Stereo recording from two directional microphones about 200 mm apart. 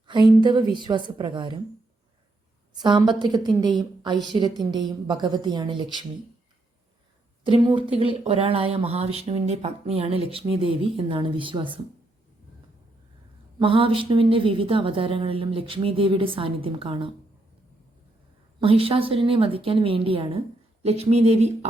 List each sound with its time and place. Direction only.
0.1 s speech: 20° right (ahead or behind)
3.2 s speech: 20° right (ahead or behind)
7.4 s speech: 25° right (ahead or behind)
13.6 s speech: 25° right (ahead or behind)
18.6 s speech: 25° right (ahead or behind)